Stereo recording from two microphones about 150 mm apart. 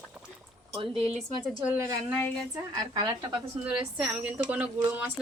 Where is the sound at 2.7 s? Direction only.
30° right (ahead or behind).